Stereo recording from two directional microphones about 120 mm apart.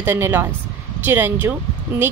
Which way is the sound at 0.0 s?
20° right (ahead or behind).